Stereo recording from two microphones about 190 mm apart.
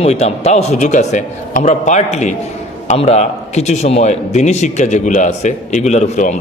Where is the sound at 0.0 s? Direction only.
35° left (ahead or behind).